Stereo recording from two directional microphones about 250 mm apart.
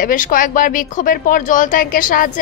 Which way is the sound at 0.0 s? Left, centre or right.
Left.